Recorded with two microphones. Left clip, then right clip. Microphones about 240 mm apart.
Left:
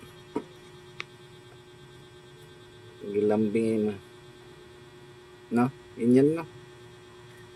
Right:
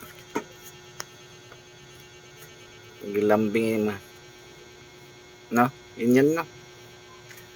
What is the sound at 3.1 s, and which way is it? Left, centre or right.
Speech, centre.